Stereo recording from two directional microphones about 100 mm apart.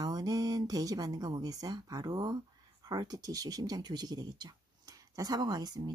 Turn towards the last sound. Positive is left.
turn(degrees=-40)  # may be behind; listen again after turning